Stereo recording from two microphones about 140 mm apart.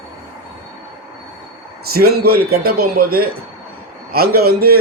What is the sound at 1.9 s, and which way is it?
Speech, 90° right.